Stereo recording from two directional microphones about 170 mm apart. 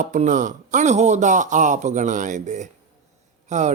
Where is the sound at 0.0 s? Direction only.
50° right (ahead or behind).